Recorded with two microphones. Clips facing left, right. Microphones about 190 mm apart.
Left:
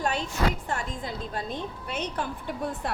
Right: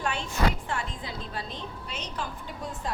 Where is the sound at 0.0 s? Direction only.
40° left (ahead or behind); by 2.2 s 55° left (ahead or behind).